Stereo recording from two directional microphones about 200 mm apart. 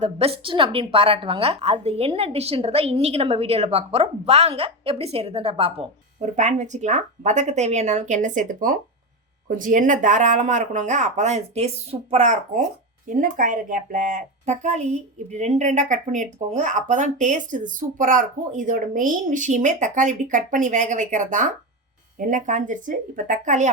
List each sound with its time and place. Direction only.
0.0 s a woman's voice: 30° right (ahead or behind)